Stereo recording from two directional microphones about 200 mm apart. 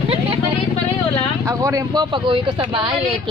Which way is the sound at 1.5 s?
15° right (ahead or behind).